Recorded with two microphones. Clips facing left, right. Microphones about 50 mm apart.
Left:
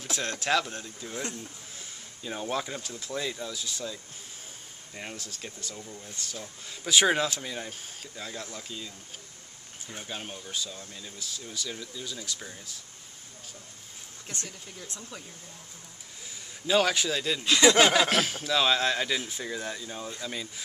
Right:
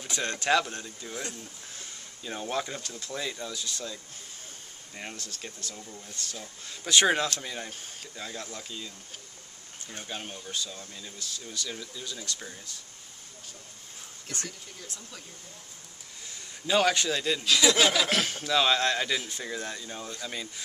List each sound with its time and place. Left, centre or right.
0.0 s speech: centre
16.3 s a man's voice: centre
17.5 s speech: left
18.1 s speech: centre